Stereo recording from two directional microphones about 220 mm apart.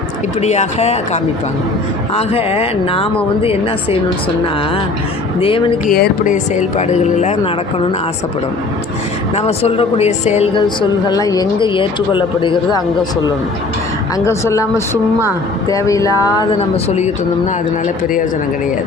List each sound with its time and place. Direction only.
0.4 s a woman's voice: 30° left (ahead or behind)
5.4 s a woman's voice: 25° left (ahead or behind)
5.9 s speech: 40° left (ahead or behind)
9.3 s a woman's voice: 30° left (ahead or behind)
14.3 s speech: 15° left (ahead or behind)
15.7 s a woman's voice: 15° left (ahead or behind)